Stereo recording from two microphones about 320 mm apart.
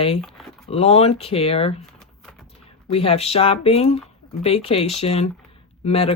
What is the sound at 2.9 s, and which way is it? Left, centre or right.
Speech, centre.